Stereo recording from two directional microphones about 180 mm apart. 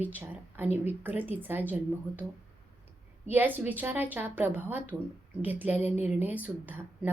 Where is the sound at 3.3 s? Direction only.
10° right (ahead or behind).